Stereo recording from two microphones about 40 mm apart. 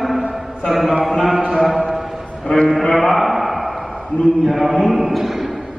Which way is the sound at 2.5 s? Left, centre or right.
Centre.